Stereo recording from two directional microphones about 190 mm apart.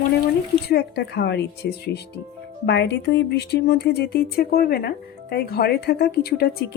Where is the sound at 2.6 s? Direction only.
65° left (ahead or behind).